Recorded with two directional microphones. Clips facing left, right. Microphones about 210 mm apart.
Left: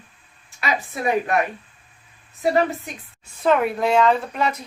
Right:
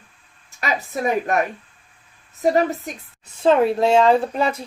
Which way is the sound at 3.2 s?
30° right (ahead or behind).